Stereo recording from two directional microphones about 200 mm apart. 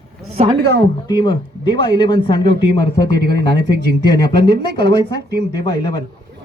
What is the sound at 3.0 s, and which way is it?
Speech, 55° right (ahead or behind).